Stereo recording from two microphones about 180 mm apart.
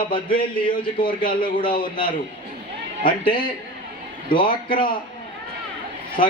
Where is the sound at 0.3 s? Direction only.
30° left (ahead or behind).